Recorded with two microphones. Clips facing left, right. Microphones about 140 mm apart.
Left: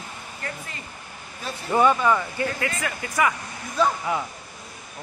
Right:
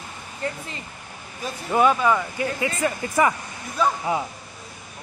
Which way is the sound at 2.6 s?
25° right (ahead or behind).